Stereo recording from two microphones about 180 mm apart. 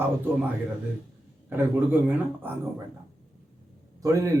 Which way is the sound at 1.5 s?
10° right (ahead or behind).